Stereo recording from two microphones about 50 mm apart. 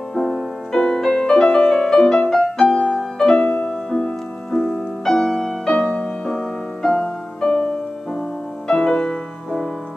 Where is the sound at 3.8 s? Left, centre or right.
Centre.